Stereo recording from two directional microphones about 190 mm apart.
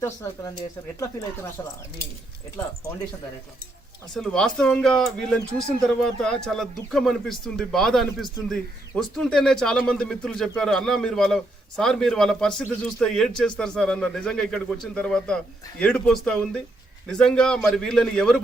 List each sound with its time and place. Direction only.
0.0 s speech: 15° left (ahead or behind)
1.6 s speech: 15° left (ahead or behind)
4.1 s speech: 5° left (ahead or behind)